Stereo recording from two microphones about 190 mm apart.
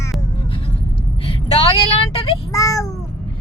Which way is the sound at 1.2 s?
30° left (ahead or behind).